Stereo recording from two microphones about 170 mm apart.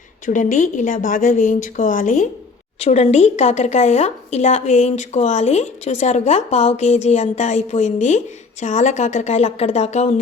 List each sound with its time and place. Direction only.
0.3 s a woman's voice: 45° left (ahead or behind)